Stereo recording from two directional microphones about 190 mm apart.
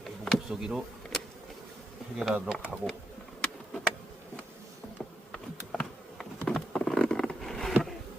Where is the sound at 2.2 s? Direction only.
5° right (ahead or behind).